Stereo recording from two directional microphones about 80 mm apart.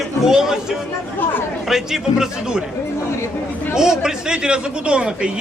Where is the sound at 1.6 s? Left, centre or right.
Centre.